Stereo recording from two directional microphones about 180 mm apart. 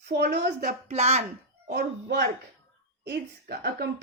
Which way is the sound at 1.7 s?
65° right (ahead or behind).